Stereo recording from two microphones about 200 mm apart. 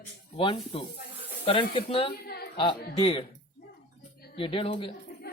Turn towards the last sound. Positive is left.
turn(degrees=25)  # may be behind; listen again after turning